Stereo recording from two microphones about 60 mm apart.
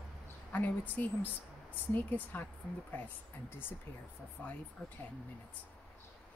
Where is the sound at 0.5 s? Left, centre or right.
Left.